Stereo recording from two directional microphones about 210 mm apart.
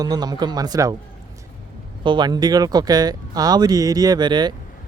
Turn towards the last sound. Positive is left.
turn(degrees=-20)  # may be behind; listen again after turning